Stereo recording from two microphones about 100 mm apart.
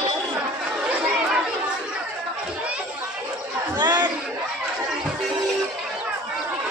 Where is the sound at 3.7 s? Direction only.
45° right (ahead or behind).